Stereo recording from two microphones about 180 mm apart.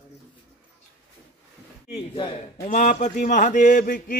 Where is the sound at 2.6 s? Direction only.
45° left (ahead or behind).